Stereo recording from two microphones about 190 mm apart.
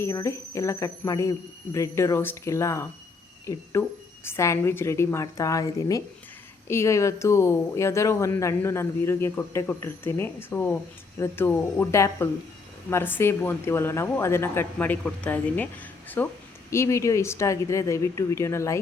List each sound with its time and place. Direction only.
0.0 s speech: 15° left (ahead or behind)